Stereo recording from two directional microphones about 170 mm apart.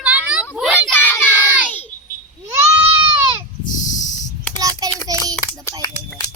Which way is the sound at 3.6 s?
50° left (ahead or behind).